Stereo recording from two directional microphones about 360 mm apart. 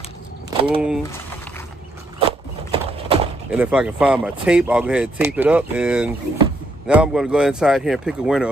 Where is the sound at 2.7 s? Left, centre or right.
Centre.